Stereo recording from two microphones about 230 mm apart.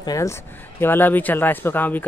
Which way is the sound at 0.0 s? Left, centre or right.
Centre.